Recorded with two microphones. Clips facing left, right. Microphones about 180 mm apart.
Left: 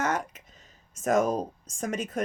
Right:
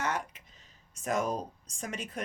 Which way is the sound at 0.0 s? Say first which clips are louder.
Left 5 dB; 45° left (ahead or behind).